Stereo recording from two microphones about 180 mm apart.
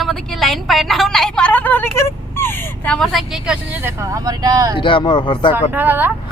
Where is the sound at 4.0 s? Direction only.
20° right (ahead or behind).